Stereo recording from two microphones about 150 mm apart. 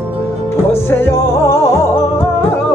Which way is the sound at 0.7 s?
15° left (ahead or behind).